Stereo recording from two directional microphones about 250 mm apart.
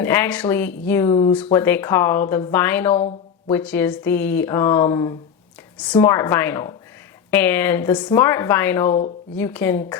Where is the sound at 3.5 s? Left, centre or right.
Centre.